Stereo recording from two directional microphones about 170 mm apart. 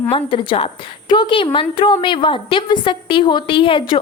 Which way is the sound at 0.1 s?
30° left (ahead or behind).